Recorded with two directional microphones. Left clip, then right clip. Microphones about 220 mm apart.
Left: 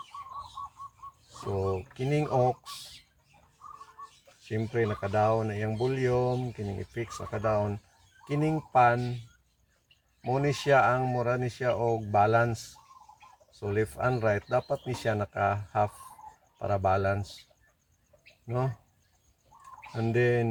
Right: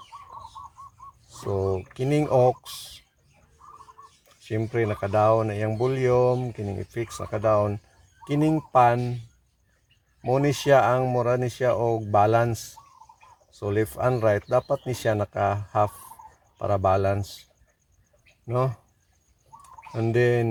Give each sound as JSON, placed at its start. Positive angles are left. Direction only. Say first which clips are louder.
{"t": 1.5, "sound": "speech", "louder": "right 5 dB", "side_deg": -45}
{"t": 4.4, "sound": "speech", "louder": "right 4 dB", "side_deg": -45}
{"t": 10.2, "sound": "speech", "louder": "right 6 dB", "side_deg": -45}
{"t": 13.6, "sound": "speech", "louder": "right 4 dB", "side_deg": -45}
{"t": 18.4, "sound": "speech", "louder": "right 7 dB", "side_deg": -40}
{"t": 20.0, "sound": "speech", "louder": "right 4 dB", "side_deg": -40}